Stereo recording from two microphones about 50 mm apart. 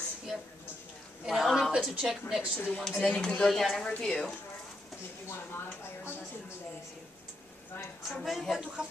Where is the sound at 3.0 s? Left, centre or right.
Left.